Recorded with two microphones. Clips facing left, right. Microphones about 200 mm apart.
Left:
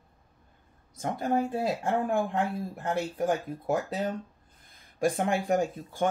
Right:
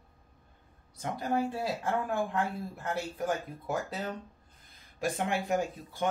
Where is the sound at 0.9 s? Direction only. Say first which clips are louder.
Left 3 dB; 50° left (ahead or behind).